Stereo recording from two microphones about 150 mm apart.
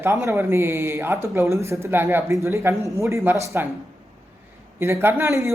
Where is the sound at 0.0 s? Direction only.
20° right (ahead or behind).